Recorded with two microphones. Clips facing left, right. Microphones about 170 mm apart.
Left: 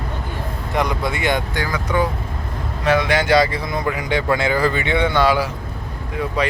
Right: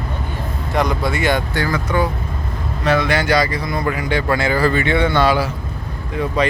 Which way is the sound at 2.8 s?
15° left (ahead or behind).